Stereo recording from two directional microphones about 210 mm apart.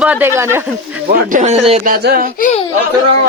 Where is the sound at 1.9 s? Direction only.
45° right (ahead or behind).